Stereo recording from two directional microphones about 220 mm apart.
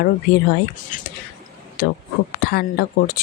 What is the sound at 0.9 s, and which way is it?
A woman's voice, 35° left (ahead or behind).